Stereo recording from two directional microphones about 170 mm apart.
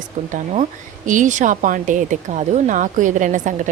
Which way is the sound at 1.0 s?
50° right (ahead or behind).